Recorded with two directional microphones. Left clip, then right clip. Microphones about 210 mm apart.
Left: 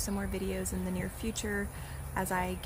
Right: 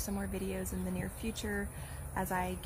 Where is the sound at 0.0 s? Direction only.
5° left (ahead or behind).